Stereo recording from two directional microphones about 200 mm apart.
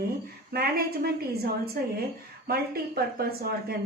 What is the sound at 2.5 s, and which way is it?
Speech, 50° right (ahead or behind).